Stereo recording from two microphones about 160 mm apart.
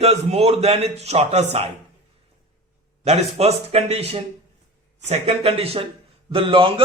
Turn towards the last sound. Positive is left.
turn(degrees=-30)  # may be behind; listen again after turning